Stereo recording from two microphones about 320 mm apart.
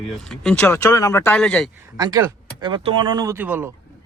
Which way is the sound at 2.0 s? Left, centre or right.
Centre.